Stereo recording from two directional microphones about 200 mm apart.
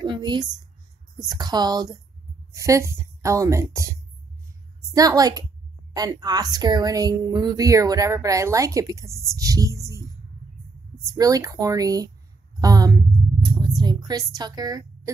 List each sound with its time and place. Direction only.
0.0 s a woman's voice: 25° right (ahead or behind)
4.9 s speech: 20° right (ahead or behind)
11.1 s a woman's voice: 15° right (ahead or behind)